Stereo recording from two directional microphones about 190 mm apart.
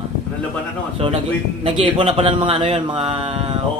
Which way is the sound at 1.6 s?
30° right (ahead or behind).